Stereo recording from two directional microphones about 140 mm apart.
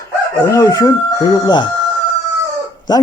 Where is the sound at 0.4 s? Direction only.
20° left (ahead or behind).